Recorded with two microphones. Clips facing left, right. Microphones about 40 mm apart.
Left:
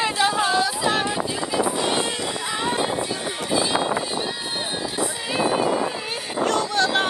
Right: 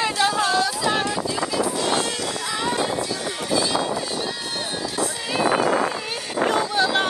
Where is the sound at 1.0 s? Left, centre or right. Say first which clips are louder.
Right 1 dB; left.